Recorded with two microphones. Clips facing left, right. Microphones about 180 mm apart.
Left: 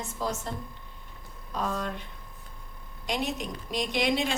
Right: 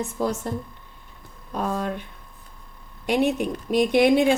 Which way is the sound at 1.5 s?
55° right (ahead or behind).